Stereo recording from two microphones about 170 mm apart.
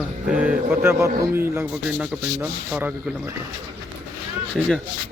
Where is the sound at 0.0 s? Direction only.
5° right (ahead or behind).